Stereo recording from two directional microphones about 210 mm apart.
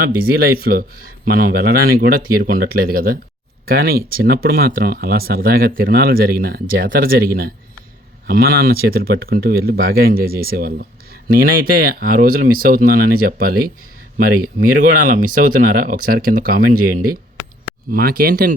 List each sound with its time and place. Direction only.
0.0 s speech: 45° right (ahead or behind)
17.9 s speech: 45° right (ahead or behind)